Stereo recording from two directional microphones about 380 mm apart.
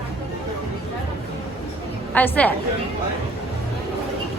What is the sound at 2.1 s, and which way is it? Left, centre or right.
Speech, centre.